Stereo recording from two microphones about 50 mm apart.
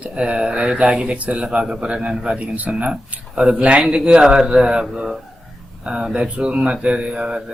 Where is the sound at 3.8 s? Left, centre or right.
Centre.